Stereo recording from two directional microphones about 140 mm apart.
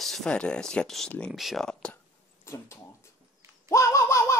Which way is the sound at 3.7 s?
20° left (ahead or behind).